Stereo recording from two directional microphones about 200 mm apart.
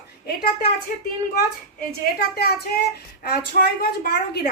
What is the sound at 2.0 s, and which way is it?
Speech, 50° left (ahead or behind).